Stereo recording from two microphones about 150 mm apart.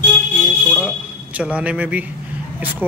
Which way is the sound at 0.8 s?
5° right (ahead or behind).